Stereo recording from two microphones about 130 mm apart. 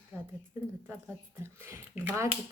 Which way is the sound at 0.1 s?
15° right (ahead or behind).